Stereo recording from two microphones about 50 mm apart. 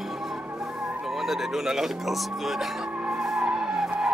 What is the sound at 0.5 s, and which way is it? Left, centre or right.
Speech, centre.